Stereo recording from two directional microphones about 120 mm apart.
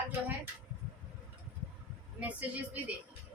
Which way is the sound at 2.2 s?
10° right (ahead or behind).